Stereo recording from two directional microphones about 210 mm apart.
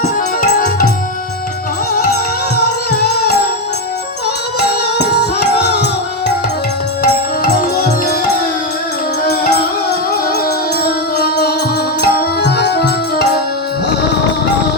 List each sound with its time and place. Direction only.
0.4 s music: 45° left (ahead or behind)
2.6 s music: 50° left (ahead or behind)
4.9 s music: 55° left (ahead or behind)
9.2 s music: 50° left (ahead or behind)
10.8 s music: 50° left (ahead or behind)